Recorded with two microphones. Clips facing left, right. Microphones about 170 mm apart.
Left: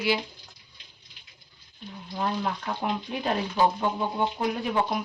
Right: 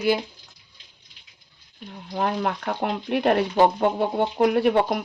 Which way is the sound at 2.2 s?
65° right (ahead or behind).